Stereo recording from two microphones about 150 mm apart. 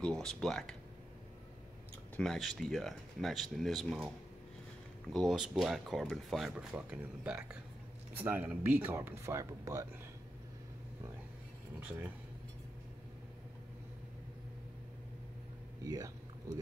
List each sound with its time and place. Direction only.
0.0 s speech: 5° left (ahead or behind)
2.1 s speech: centre (ahead or behind)
5.1 s speech: centre (ahead or behind); by 9.8 s 20° right (ahead or behind)
15.8 s a sound: 25° right (ahead or behind)